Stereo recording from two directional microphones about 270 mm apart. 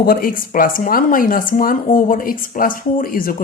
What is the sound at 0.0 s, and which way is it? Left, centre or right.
Speech, left.